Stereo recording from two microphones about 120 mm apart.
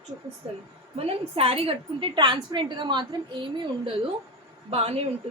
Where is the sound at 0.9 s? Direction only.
55° right (ahead or behind).